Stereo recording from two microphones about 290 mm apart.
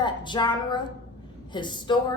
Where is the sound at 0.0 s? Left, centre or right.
Centre.